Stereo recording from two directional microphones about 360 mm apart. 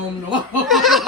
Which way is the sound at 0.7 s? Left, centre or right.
Centre.